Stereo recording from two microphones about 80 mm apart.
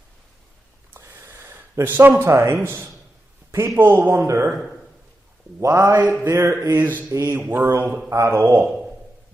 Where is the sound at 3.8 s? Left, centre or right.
Right.